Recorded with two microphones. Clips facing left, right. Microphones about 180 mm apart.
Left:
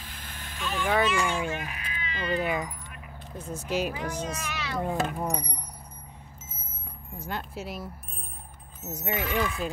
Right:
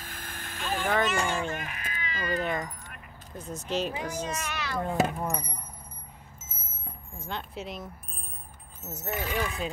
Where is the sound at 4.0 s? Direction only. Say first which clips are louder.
Even; 10° right (ahead or behind).